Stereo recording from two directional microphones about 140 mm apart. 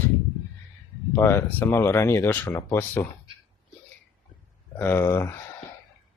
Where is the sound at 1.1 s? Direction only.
20° left (ahead or behind).